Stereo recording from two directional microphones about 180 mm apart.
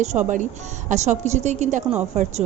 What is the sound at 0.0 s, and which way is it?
A woman's voice, 40° right (ahead or behind).